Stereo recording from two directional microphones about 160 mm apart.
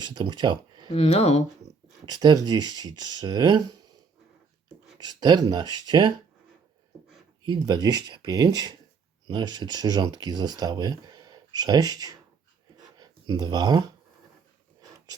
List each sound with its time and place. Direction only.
0.0 s speech: 30° right (ahead or behind)
0.9 s speech: 40° left (ahead or behind)
2.0 s speech: 25° right (ahead or behind)
4.9 s speech: 25° right (ahead or behind)
7.4 s speech: 25° right (ahead or behind)
12.7 s a sound: 25° right (ahead or behind)